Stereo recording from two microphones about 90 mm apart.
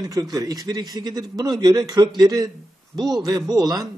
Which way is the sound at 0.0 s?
45° right (ahead or behind).